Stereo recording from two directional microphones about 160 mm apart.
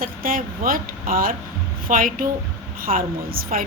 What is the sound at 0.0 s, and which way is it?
A woman's voice, 60° right (ahead or behind).